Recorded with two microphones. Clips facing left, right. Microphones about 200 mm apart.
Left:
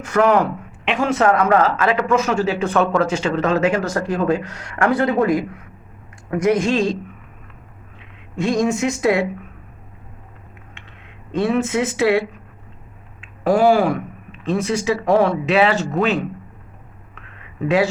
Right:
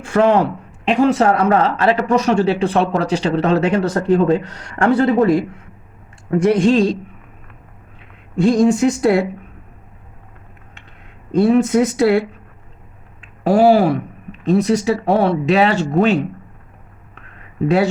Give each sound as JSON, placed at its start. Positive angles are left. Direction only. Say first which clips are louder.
{"t": 0.0, "sound": "speech", "louder": "right 2 dB", "side_deg": -30}
{"t": 8.4, "sound": "speech", "louder": "right 5 dB", "side_deg": -35}
{"t": 11.3, "sound": "speech", "louder": "right 6 dB", "side_deg": -40}
{"t": 13.2, "sound": "speech", "louder": "right 3 dB", "side_deg": -40}
{"t": 17.2, "sound": "a sound", "louder": "right 5 dB", "side_deg": -40}